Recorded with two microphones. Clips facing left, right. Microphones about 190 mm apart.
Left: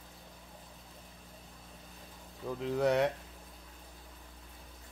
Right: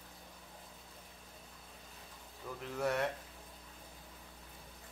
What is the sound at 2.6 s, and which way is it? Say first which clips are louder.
Speech: left 7 dB; 15° left (ahead or behind).